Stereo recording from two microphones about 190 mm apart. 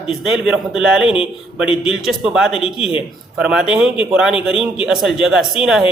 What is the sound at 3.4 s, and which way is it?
A man's voice, 5° right (ahead or behind).